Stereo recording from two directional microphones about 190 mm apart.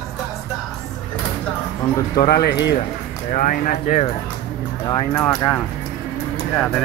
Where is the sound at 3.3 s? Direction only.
45° left (ahead or behind).